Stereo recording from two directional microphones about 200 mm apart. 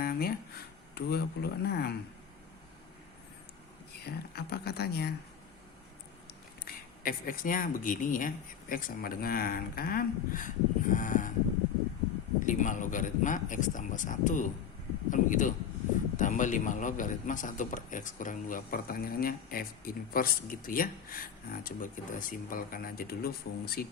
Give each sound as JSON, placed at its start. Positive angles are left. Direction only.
{"t": 0.0, "sound": "a sound", "side_deg": 50}
{"t": 0.9, "sound": "a man's voice", "side_deg": 55}
{"t": 4.0, "sound": "a man's voice", "side_deg": 50}
{"t": 6.7, "sound": "a man's voice", "side_deg": 45}
{"t": 12.5, "sound": "a man's voice", "side_deg": 40}